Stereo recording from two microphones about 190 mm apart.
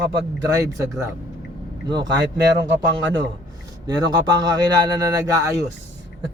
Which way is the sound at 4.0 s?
20° right (ahead or behind).